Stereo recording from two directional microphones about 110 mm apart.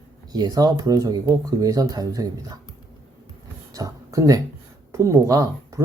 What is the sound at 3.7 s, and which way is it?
Speech, 35° right (ahead or behind).